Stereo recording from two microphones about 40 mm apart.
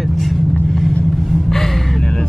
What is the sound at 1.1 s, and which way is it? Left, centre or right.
Gasp, centre.